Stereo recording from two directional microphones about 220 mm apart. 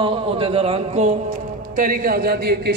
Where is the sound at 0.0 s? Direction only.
25° right (ahead or behind).